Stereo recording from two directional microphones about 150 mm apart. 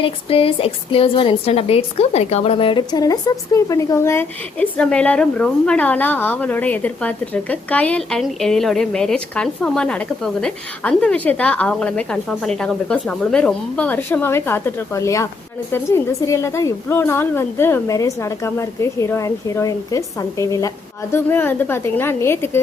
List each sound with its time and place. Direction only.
0.0 s a woman's voice: 40° left (ahead or behind); by 22.6 s 15° left (ahead or behind)